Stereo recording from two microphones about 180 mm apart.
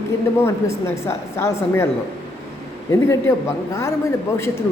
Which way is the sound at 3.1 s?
15° left (ahead or behind).